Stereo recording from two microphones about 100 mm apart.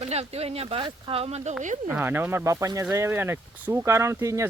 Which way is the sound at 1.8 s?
20° right (ahead or behind).